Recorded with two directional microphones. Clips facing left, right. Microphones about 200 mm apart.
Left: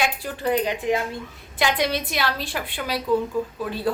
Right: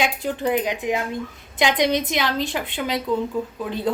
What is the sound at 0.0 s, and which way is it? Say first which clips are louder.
A woman's voice: right 2 dB; 15° right (ahead or behind).